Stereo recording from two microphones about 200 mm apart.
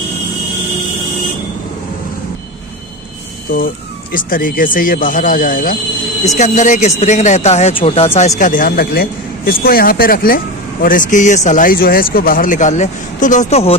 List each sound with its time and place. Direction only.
3.5 s a man's voice: 45° left (ahead or behind)
8.4 s a man's voice: 40° left (ahead or behind)